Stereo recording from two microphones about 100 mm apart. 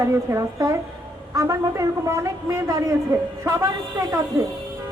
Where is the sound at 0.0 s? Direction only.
30° right (ahead or behind).